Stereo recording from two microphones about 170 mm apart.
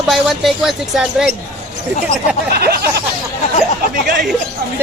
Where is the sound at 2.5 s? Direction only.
70° right (ahead or behind).